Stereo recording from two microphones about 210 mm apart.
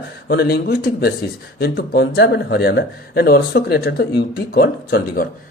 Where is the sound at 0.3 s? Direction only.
50° left (ahead or behind).